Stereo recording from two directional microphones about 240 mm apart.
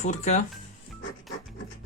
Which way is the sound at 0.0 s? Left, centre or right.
Left.